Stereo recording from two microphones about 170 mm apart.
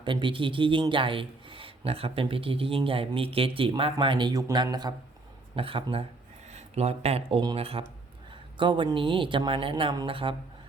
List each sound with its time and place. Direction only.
0.0 s a man's voice: 30° right (ahead or behind)